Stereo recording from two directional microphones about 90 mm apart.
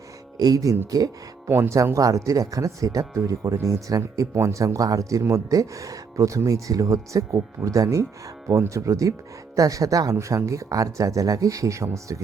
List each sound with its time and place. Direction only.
0.3 s speech: 45° right (ahead or behind)
1.5 s speech: 25° right (ahead or behind)